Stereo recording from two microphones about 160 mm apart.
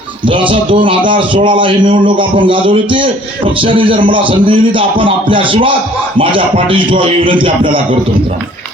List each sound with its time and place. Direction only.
0.5 s a man's voice: 30° right (ahead or behind)